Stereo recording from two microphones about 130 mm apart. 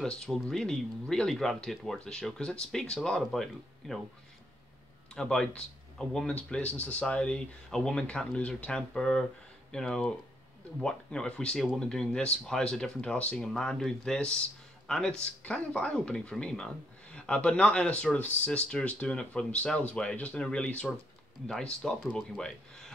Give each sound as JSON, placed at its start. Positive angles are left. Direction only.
{"t": 0.0, "sound": "speech", "side_deg": 5}
{"t": 5.1, "sound": "speech", "side_deg": 5}